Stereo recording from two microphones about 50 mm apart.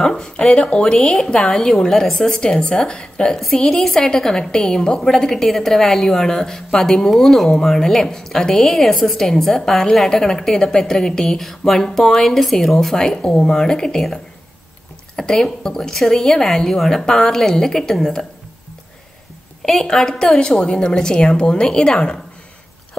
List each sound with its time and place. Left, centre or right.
0.0 s a woman's voice: centre
15.1 s a woman's voice: centre
19.6 s a woman's voice: centre